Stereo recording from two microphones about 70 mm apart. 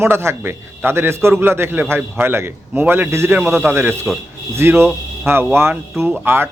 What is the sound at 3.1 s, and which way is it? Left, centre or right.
Speech, right.